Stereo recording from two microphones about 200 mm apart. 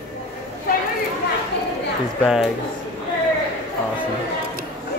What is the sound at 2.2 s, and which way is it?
Speech, centre (ahead or behind).